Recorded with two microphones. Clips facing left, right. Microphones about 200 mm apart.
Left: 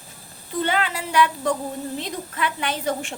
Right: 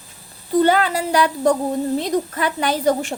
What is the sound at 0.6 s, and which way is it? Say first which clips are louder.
A woman's voice: right 7 dB; 40° right (ahead or behind).